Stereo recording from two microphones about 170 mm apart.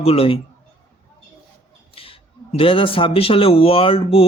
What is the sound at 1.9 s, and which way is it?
Speech, 35° left (ahead or behind).